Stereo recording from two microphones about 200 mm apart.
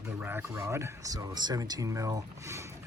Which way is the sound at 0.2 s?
10° right (ahead or behind).